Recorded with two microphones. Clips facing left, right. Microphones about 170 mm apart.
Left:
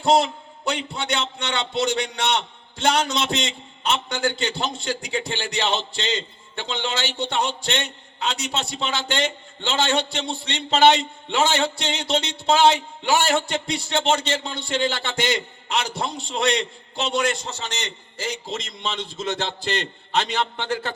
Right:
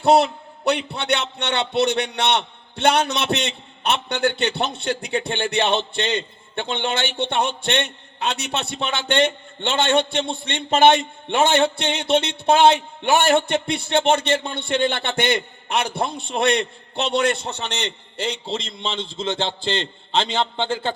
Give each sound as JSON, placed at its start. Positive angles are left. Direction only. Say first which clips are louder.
{"t": 0.0, "sound": "a man's voice", "louder": "right 3 dB", "side_deg": -65}
{"t": 18.3, "sound": "a man's voice", "louder": "right 2 dB", "side_deg": -30}